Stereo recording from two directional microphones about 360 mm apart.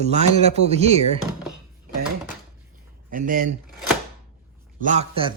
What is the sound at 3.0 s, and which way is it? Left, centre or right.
Speech, right.